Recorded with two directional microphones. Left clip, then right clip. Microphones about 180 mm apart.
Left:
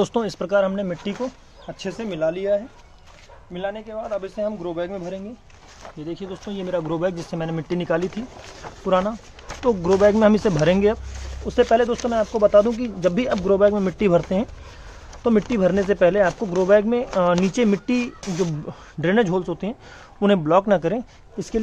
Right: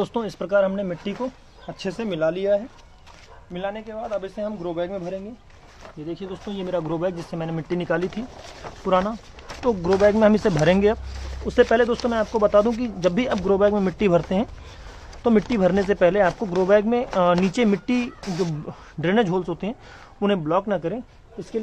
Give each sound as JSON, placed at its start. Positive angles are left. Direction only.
{"t": 0.0, "sound": "speech", "side_deg": 20}
{"t": 1.7, "sound": "speech", "side_deg": -10}
{"t": 2.0, "sound": "speech", "side_deg": -20}
{"t": 4.1, "sound": "speech", "side_deg": 0}
{"t": 6.0, "sound": "speech", "side_deg": 10}
{"t": 20.2, "sound": "speech", "side_deg": 25}